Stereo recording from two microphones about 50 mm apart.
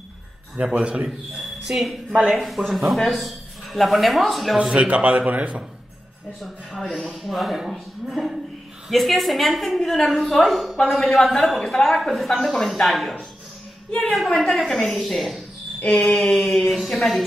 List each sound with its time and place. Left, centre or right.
0.6 s speech: right
1.7 s a man's voice: centre
4.7 s speech: right
6.4 s a man's voice: centre
14.1 s a man's voice: centre
16.0 s a sound: left
16.3 s a man's voice: centre